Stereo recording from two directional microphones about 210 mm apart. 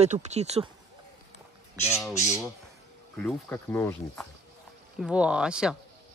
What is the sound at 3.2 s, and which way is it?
Speech, 10° left (ahead or behind).